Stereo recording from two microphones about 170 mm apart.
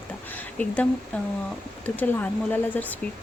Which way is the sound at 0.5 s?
10° left (ahead or behind).